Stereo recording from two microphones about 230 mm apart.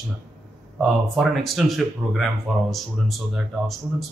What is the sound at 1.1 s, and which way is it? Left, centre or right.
Speech, centre.